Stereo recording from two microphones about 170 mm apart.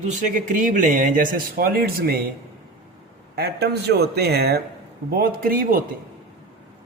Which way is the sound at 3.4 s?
70° right (ahead or behind).